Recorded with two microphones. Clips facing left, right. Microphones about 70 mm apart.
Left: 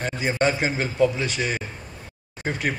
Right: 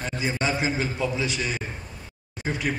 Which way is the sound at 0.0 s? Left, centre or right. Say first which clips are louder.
Left 4 dB; left.